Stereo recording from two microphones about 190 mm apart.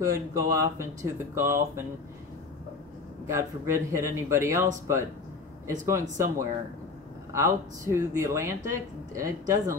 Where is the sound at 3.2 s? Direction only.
15° right (ahead or behind).